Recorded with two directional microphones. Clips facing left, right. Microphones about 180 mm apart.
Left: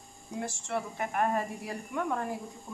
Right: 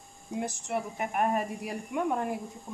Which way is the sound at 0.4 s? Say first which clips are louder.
Right 2 dB; 15° right (ahead or behind).